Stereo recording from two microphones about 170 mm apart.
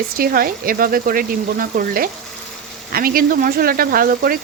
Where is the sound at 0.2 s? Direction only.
60° right (ahead or behind).